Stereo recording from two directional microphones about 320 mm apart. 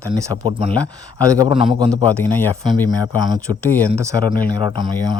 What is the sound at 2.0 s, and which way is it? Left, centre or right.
Speech, centre.